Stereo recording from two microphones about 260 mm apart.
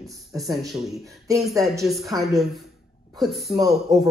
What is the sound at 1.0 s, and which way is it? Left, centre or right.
Speech, centre.